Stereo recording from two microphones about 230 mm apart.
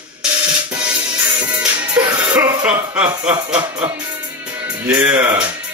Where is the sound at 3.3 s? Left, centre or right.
Centre.